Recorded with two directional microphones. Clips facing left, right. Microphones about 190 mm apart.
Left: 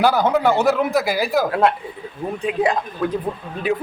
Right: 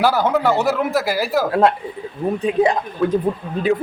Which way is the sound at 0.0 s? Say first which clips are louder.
Even; 5° right (ahead or behind).